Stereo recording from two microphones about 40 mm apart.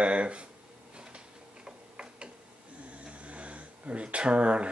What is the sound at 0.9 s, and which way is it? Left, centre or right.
Tick-tock, right.